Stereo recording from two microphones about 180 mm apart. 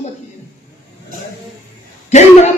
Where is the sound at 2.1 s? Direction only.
40° left (ahead or behind).